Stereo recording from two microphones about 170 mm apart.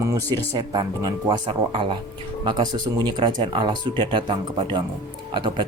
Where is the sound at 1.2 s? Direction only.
30° right (ahead or behind).